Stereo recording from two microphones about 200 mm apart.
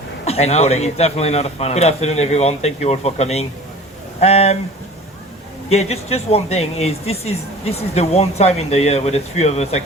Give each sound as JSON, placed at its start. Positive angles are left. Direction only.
{"t": 0.3, "sound": "speech", "side_deg": 30}
{"t": 5.6, "sound": "speech", "side_deg": 30}